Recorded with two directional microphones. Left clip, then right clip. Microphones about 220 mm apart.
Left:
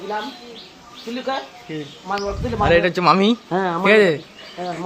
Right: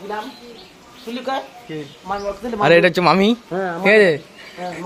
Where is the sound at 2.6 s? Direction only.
55° right (ahead or behind).